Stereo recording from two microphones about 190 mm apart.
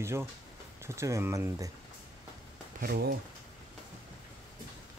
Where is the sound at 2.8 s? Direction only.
55° right (ahead or behind).